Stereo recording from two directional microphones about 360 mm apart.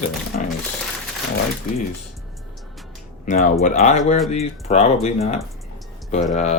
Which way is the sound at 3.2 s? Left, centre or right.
Centre.